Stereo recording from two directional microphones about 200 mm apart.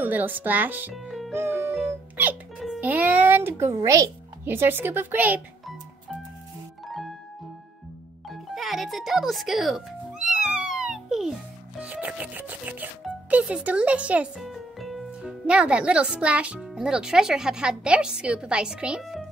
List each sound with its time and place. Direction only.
0.0 s speech: 10° right (ahead or behind)
1.3 s music: 10° right (ahead or behind)
2.7 s a child's voice: 5° right (ahead or behind)
6.9 s music: centre (ahead or behind)
8.3 s music: centre (ahead or behind)
11.8 s speech: 5° right (ahead or behind)